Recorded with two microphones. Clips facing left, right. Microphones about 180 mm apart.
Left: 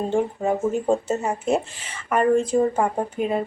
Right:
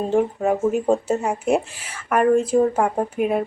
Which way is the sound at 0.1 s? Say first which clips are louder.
Right 5 dB; 5° right (ahead or behind).